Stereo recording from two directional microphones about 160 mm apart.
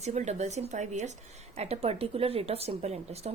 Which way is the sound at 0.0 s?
45° right (ahead or behind).